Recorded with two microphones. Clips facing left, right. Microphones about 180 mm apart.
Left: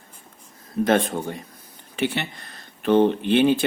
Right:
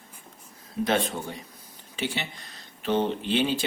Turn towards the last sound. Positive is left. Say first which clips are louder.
# left 7 dB
turn(degrees=55)  # may be behind; listen again after turning